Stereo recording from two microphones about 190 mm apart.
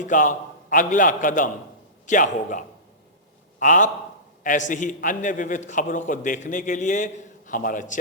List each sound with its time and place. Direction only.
0.0 s a man's voice: 45° left (ahead or behind)